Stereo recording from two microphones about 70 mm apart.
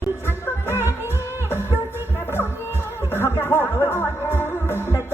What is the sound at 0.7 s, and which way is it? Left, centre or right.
Music, left.